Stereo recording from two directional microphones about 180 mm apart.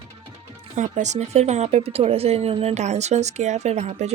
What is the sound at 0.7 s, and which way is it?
Speech, 40° right (ahead or behind).